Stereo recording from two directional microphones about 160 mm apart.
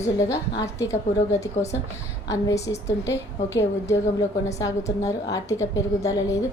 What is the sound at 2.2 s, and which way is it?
A woman's voice, 20° left (ahead or behind).